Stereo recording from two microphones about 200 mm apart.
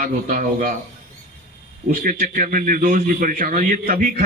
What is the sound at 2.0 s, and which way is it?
A man's voice, 45° right (ahead or behind).